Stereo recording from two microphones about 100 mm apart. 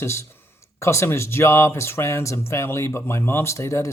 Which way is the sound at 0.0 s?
25° left (ahead or behind).